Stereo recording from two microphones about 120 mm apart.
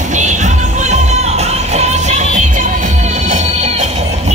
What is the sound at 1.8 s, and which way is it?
Music, 70° right (ahead or behind).